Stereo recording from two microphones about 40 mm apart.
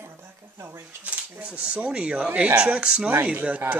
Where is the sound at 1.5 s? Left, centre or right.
Right.